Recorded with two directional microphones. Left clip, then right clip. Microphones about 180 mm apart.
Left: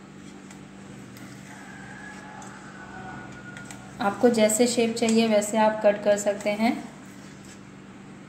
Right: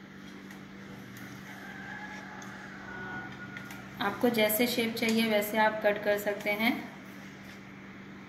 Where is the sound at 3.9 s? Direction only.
45° left (ahead or behind).